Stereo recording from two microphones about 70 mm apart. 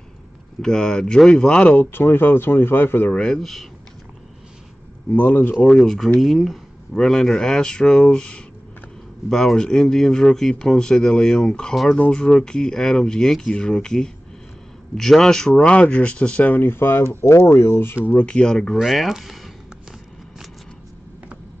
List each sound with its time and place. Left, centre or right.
0.6 s speech: centre
1.8 s speech: left
3.1 s speech: centre
3.3 s speech: centre
5.1 s speech: left
5.7 s speech: centre
15.5 s speech: centre
16.6 s speech: left
18.0 s speech: centre